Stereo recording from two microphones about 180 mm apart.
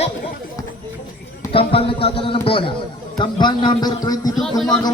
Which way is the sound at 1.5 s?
30° left (ahead or behind).